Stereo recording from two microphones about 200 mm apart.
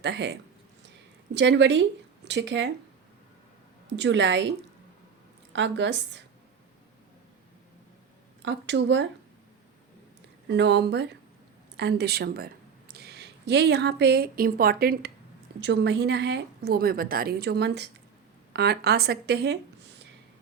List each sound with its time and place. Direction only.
0.0 s a woman's voice: 60° right (ahead or behind)
3.9 s a woman's voice: 65° right (ahead or behind)
5.5 s a woman's voice: 65° right (ahead or behind)
8.4 s a woman's voice: 60° right (ahead or behind)
10.5 s a woman's voice: 60° right (ahead or behind)
15.6 s a woman's voice: 60° right (ahead or behind)